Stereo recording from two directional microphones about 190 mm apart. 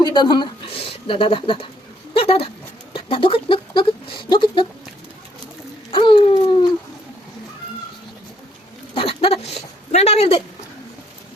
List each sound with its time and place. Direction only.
0.0 s speech: 25° left (ahead or behind)
2.1 s a sound: 30° left (ahead or behind)
2.9 s speech: 30° left (ahead or behind)
5.9 s a sound: 25° left (ahead or behind)
6.3 s speech: 30° left (ahead or behind)
9.0 s speech: 30° left (ahead or behind)